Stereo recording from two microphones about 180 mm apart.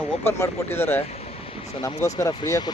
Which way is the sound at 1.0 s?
35° left (ahead or behind).